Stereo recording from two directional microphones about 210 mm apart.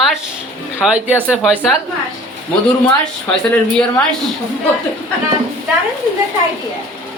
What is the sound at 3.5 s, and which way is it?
Speech, 5° left (ahead or behind).